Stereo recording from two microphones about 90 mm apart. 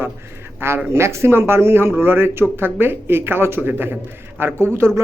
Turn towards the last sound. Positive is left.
turn(degrees=-30)  # may be behind; listen again after turning